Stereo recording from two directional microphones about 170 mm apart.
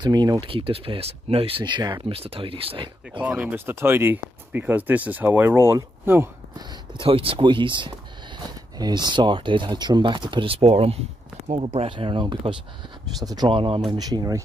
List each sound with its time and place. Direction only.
0.0 s speech: 25° right (ahead or behind)
3.2 s speech: 10° right (ahead or behind)
7.0 s speech: 35° right (ahead or behind)